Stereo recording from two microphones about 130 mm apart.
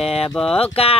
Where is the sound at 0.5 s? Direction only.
45° left (ahead or behind).